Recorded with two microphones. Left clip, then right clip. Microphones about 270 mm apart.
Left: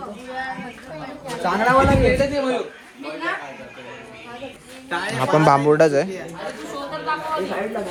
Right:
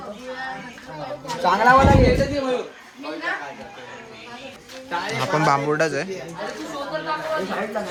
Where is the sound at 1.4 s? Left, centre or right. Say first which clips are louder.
Right 2 dB; right.